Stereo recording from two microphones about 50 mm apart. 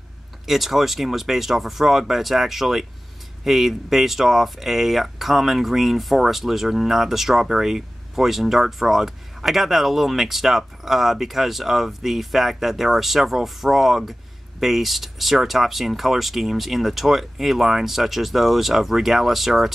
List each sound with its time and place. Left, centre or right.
0.5 s speech: centre